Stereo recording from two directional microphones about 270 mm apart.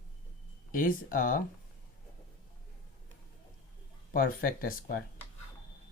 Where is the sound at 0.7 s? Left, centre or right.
Left.